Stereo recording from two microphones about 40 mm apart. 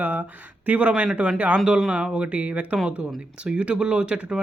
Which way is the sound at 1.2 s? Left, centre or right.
Right.